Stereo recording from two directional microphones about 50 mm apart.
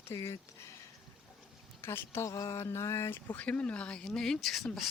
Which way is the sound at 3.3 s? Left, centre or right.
Left.